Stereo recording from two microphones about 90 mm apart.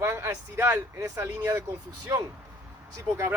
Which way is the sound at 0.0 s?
30° right (ahead or behind).